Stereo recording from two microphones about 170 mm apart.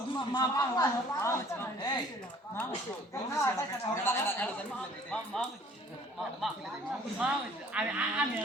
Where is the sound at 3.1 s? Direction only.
15° left (ahead or behind).